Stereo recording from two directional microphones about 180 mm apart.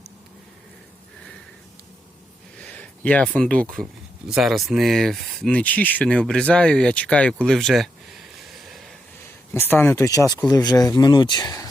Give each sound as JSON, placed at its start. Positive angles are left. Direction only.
{"t": 2.6, "sound": "a sound", "side_deg": 10}
{"t": 4.3, "sound": "speech", "side_deg": 0}
{"t": 8.7, "sound": "vehicle", "side_deg": 0}
{"t": 9.5, "sound": "speech", "side_deg": 10}